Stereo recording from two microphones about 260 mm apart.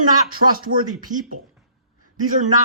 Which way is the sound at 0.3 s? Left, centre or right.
Right.